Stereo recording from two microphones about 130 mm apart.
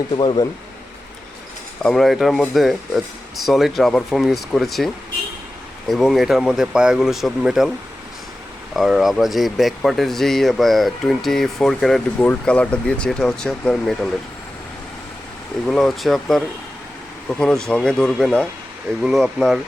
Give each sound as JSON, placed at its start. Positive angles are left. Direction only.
{"t": 0.2, "sound": "speech", "side_deg": 40}
{"t": 1.8, "sound": "speech", "side_deg": 0}
{"t": 5.9, "sound": "speech", "side_deg": 0}
{"t": 8.7, "sound": "speech", "side_deg": 0}
{"t": 15.6, "sound": "speech", "side_deg": 0}